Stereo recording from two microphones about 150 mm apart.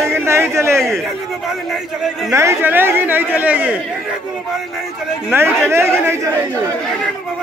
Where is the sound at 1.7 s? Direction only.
Centre (ahead or behind).